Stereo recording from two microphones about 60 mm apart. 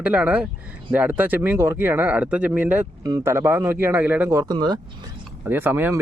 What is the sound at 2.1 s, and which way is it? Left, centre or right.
Speech, right.